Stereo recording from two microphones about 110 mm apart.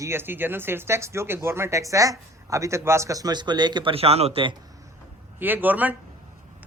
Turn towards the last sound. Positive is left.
turn(degrees=-15)  # may be behind; listen again after turning